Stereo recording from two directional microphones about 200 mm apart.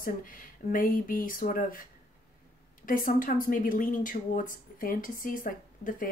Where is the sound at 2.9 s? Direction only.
45° left (ahead or behind).